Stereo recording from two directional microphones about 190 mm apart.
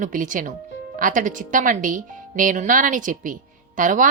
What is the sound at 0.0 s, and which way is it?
A woman's voice, 45° right (ahead or behind).